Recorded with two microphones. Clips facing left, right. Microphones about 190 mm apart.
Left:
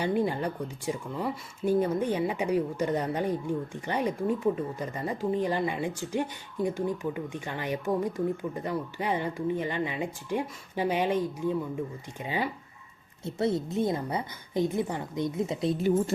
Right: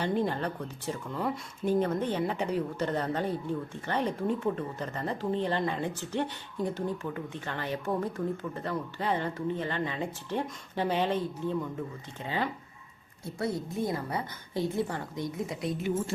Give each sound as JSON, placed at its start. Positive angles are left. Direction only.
{"t": 0.0, "sound": "speech", "side_deg": 10}
{"t": 13.2, "sound": "a woman's voice", "side_deg": 25}